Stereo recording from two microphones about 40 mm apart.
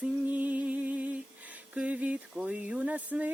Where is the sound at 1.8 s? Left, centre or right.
Right.